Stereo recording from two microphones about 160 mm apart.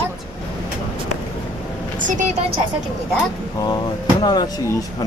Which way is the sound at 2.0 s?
50° right (ahead or behind).